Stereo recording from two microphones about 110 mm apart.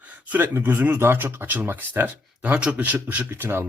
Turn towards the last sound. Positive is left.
turn(degrees=-20)  # may be behind; listen again after turning